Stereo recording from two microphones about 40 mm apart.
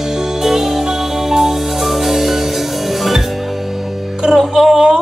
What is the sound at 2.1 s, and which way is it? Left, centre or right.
Music, centre.